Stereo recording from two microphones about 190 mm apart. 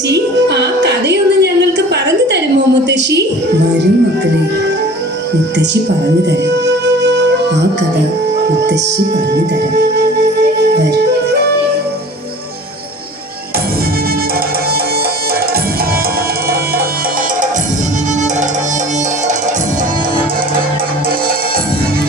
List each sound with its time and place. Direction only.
0.1 s music: 65° right (ahead or behind)
6.7 s music: 65° right (ahead or behind)
9.3 s music: 60° right (ahead or behind)